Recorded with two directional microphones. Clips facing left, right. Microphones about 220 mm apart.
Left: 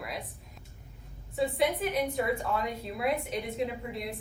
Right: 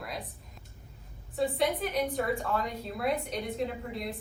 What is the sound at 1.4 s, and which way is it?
A woman's voice, centre (ahead or behind).